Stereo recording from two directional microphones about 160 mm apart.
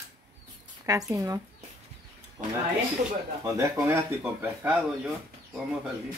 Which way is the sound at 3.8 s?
15° right (ahead or behind).